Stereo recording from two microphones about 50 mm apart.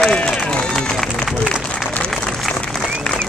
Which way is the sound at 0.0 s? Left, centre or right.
Centre.